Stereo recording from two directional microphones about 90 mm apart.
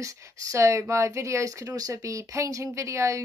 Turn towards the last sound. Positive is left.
turn(degrees=-35)  # may be behind; listen again after turning